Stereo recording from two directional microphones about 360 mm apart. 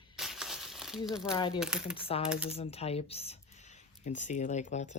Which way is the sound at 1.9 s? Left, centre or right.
Centre.